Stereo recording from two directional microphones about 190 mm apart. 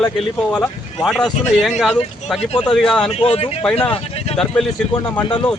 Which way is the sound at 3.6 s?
5° left (ahead or behind).